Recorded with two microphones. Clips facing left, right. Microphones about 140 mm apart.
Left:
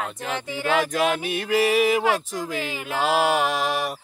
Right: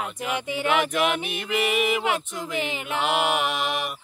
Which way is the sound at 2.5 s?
20° right (ahead or behind).